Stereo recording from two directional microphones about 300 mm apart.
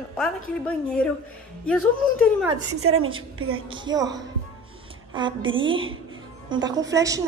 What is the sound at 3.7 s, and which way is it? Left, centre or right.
A woman's voice, centre.